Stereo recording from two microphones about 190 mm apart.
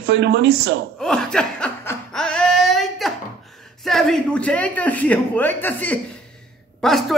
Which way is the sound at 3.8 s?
Centre (ahead or behind).